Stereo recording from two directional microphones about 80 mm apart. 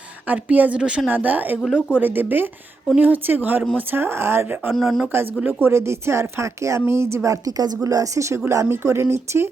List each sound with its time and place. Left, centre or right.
0.3 s speech: right
1.6 s speech: centre
2.0 s speech: right
4.7 s speech: centre
5.5 s speech: right